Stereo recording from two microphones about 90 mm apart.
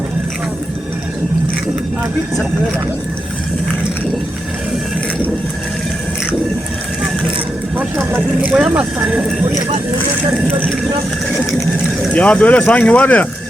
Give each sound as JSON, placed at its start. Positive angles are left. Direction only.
{"t": 7.8, "sound": "vehicle", "side_deg": -20}
{"t": 8.4, "sound": "speech", "side_deg": -15}
{"t": 12.1, "sound": "speech", "side_deg": 15}